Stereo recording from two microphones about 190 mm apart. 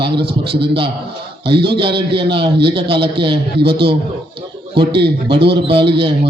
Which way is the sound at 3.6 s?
60° right (ahead or behind).